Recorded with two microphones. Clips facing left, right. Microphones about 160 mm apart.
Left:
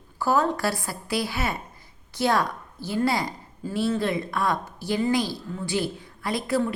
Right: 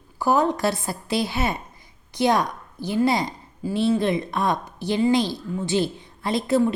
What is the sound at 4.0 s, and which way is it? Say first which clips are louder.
A woman's voice: right 3 dB; 20° right (ahead or behind).